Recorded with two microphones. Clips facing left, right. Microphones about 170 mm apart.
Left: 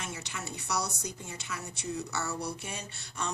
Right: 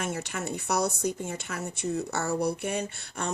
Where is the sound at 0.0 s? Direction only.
50° right (ahead or behind).